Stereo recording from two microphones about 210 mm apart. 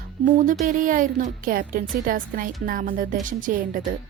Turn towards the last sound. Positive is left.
turn(degrees=-40)  # may be behind; listen again after turning